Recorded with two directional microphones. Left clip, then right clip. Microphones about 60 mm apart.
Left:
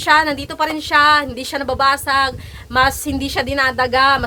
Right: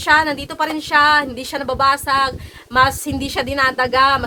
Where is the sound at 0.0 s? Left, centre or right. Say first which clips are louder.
Left 1 dB; left.